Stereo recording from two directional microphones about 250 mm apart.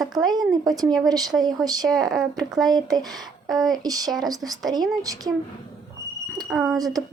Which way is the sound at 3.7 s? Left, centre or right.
Centre.